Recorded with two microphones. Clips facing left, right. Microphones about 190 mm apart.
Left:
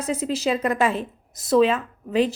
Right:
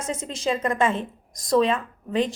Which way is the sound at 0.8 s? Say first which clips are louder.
Right 2 dB; 25° right (ahead or behind).